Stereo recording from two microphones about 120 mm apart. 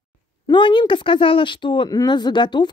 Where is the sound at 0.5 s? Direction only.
40° left (ahead or behind).